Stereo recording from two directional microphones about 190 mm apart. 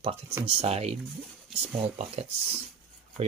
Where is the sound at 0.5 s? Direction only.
30° right (ahead or behind).